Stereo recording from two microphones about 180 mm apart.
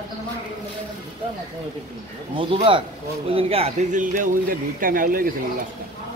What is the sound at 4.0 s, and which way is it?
Speech, 50° right (ahead or behind).